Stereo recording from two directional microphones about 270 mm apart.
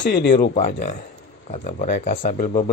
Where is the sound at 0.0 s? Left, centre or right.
Left.